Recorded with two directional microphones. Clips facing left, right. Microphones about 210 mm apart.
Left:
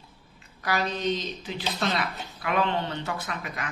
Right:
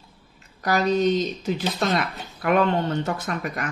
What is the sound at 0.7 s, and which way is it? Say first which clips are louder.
Speech: right 7 dB; 40° right (ahead or behind).